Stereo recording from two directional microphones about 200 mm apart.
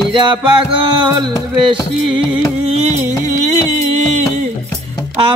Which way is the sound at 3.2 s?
20° left (ahead or behind).